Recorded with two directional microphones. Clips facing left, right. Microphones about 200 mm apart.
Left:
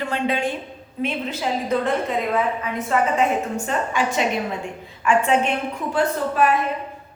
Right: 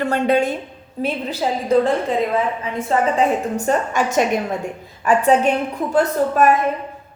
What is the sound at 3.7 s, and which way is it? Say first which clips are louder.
A woman's voice: right 6 dB; 45° right (ahead or behind).